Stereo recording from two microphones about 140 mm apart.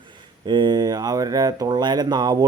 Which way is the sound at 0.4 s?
30° right (ahead or behind).